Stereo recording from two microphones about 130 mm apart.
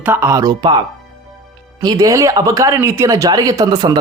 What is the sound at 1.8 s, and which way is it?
Speech, 25° right (ahead or behind).